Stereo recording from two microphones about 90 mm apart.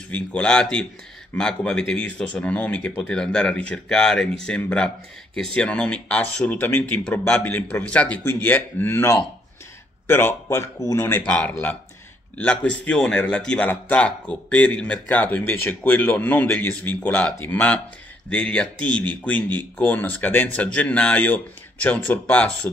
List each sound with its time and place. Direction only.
0.1 s a man's voice: 10° left (ahead or behind)
10.0 s speech: 25° left (ahead or behind)
11.0 s a man's voice: 25° left (ahead or behind)